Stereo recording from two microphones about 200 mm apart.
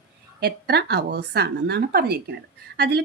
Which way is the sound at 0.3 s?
55° right (ahead or behind).